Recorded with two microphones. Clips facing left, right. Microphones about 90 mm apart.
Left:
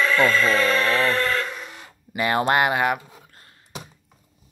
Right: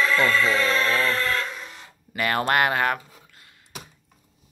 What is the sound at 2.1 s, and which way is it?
Speech, 20° left (ahead or behind).